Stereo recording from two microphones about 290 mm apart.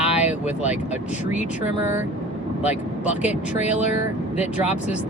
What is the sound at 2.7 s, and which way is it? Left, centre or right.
Speech, centre.